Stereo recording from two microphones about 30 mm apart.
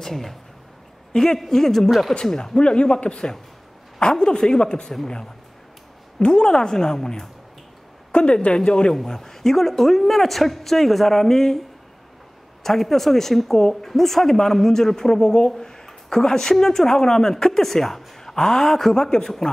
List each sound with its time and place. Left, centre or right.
0.0 s speech: centre
1.1 s speech: centre
2.6 s speech: left
6.1 s speech: left
8.1 s a woman's voice: left
8.9 s speech: centre
12.6 s speech: centre
18.9 s speech: left
19.2 s speech: centre